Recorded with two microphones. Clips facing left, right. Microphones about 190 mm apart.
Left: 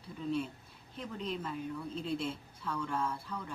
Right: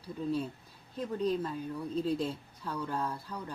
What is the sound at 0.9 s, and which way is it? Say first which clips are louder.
A woman's voice: right 8 dB; 40° right (ahead or behind).